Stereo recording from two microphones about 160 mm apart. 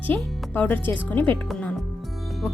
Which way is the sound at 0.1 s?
10° left (ahead or behind).